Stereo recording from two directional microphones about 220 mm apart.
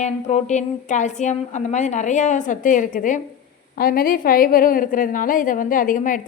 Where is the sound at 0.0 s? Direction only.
30° left (ahead or behind).